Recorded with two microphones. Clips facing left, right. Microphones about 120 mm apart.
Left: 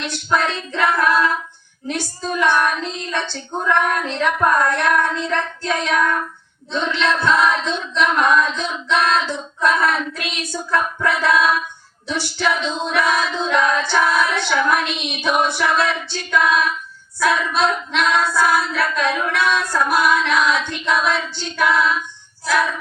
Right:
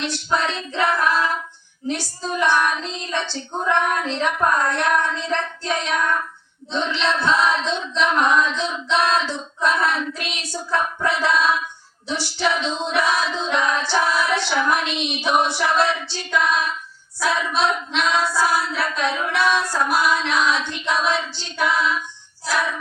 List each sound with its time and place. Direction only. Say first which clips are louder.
0.0 s female singing: left 2 dB; 55° left (ahead or behind)
1.9 s singing: left 1 dB; 55° left (ahead or behind)